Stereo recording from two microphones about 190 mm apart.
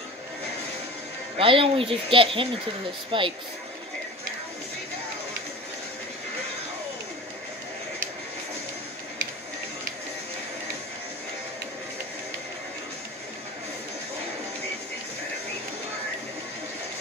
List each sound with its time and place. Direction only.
1.4 s speech: 30° right (ahead or behind)